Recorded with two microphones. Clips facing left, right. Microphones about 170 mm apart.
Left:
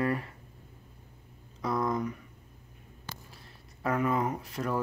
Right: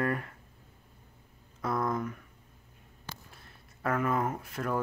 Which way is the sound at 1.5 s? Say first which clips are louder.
Left 1 dB; centre (ahead or behind).